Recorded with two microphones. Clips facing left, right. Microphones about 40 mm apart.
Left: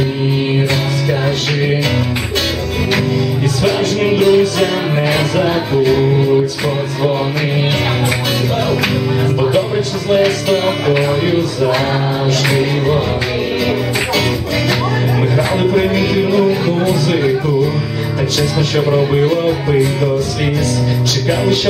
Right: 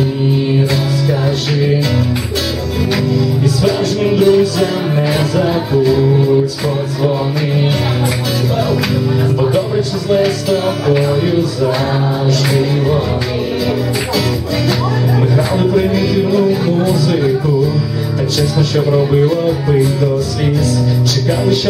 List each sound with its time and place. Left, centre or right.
3.6 s speech: left
9.5 s speech: left
15.3 s speech: left
18.8 s speech: left